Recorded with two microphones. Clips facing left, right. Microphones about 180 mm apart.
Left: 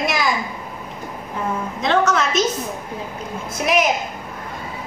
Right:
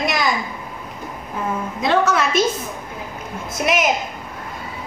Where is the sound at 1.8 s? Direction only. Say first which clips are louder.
Even; 5° right (ahead or behind).